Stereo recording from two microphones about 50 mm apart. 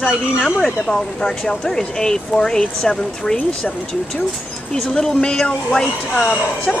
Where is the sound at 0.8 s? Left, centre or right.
Centre.